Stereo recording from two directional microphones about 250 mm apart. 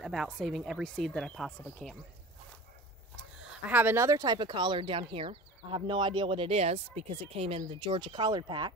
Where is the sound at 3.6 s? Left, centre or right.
Centre.